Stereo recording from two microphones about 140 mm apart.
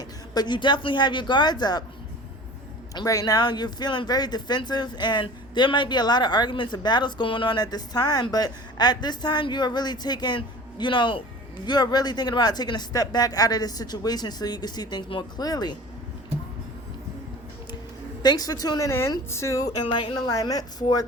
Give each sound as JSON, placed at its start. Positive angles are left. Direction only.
{"t": 0.0, "sound": "speech", "side_deg": 30}
{"t": 2.9, "sound": "speech", "side_deg": 25}
{"t": 18.2, "sound": "speech", "side_deg": 30}